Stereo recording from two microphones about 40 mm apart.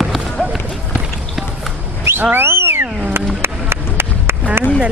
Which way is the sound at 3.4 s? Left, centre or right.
Right.